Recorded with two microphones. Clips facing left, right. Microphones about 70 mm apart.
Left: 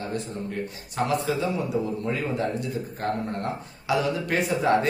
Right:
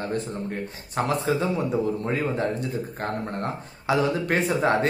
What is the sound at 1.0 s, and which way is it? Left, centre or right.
Speech, right.